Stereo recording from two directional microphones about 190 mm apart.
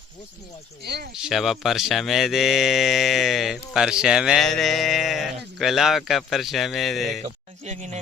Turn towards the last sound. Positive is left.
turn(degrees=-35)  # may be behind; listen again after turning